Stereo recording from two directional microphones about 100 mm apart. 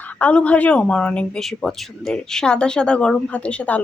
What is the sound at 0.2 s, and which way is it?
Speech, 15° left (ahead or behind).